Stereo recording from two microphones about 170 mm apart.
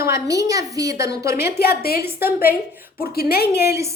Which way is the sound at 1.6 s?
65° left (ahead or behind).